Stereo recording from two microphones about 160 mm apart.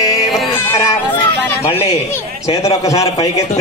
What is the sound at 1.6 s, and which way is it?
Music, 40° left (ahead or behind).